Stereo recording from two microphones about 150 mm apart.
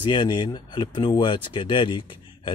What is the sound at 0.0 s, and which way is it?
Speech, 30° left (ahead or behind).